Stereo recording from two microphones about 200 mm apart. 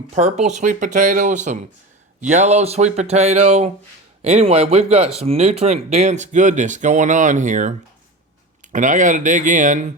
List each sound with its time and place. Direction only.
0.2 s speech: 35° right (ahead or behind)
8.7 s speech: 40° right (ahead or behind)